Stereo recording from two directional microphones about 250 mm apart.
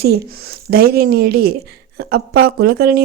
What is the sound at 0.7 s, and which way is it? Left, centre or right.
Speech, right.